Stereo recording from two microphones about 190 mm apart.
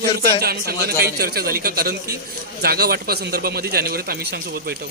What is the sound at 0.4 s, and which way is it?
A man's voice, 55° right (ahead or behind).